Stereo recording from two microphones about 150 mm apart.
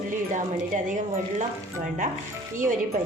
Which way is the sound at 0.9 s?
55° right (ahead or behind).